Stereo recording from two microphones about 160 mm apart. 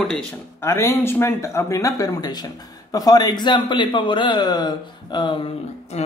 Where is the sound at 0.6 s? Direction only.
15° left (ahead or behind).